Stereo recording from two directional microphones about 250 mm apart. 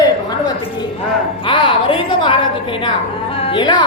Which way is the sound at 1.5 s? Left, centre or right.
Centre.